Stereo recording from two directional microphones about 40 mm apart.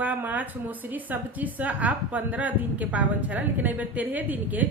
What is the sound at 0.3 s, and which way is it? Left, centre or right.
A woman's voice, right.